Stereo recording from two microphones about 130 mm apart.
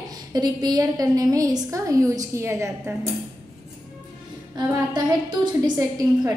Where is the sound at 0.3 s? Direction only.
30° right (ahead or behind).